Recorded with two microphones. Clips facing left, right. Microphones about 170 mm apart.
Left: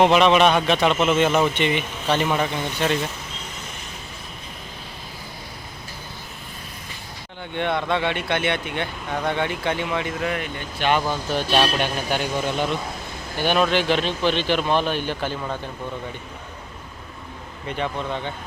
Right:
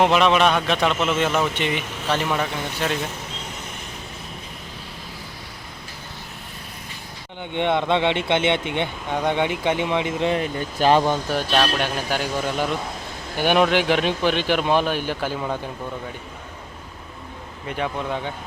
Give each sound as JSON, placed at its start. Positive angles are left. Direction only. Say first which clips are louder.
{"t": 0.0, "sound": "a man's voice", "louder": "left 2 dB", "side_deg": 0}
{"t": 7.5, "sound": "speech", "louder": "right 3 dB", "side_deg": -20}
{"t": 11.1, "sound": "speech", "louder": "right 1 dB", "side_deg": -10}
{"t": 11.5, "sound": "a man's voice", "louder": "left 1 dB", "side_deg": 5}
{"t": 17.7, "sound": "speech", "louder": "right 1 dB", "side_deg": -5}